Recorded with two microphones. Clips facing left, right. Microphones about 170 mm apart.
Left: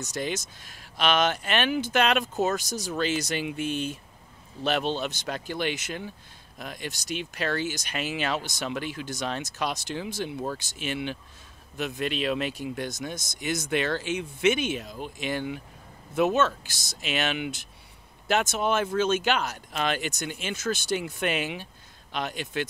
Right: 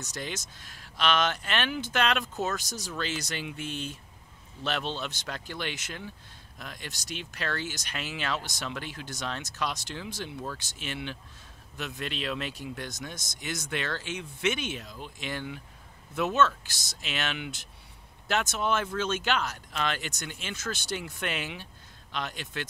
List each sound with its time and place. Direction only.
0.0 s speech: 20° left (ahead or behind)
2.7 s speech: 45° left (ahead or behind)
3.0 s speech: 10° left (ahead or behind)